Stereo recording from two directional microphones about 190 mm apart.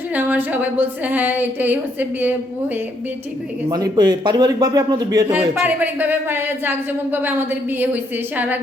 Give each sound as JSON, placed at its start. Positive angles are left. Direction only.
{"t": 0.1, "sound": "speech", "side_deg": -10}
{"t": 3.7, "sound": "a man's voice", "side_deg": -20}
{"t": 5.3, "sound": "speech", "side_deg": -10}